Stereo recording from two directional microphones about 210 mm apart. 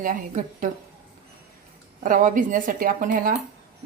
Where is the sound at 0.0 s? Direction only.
40° right (ahead or behind).